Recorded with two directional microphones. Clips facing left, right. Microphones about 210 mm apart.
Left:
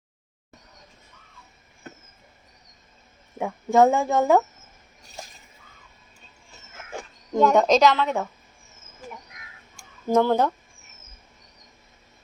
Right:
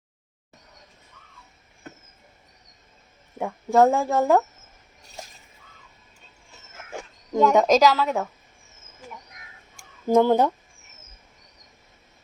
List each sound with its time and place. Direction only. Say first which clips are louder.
3.3 s speech: even; centre (ahead or behind)
6.9 s speech: even; 5° right (ahead or behind)
10.1 s speech: right 2 dB; 15° right (ahead or behind)